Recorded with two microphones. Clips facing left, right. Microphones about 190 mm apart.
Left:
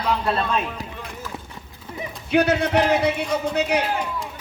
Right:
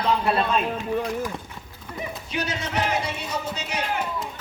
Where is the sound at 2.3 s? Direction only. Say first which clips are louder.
Left 11 dB; 60° left (ahead or behind).